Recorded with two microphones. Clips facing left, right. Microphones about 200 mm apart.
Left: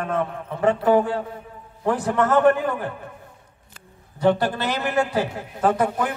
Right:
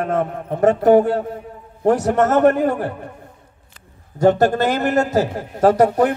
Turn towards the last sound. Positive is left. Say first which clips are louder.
# right 7 dB
turn(degrees=-40)  # may be behind; listen again after turning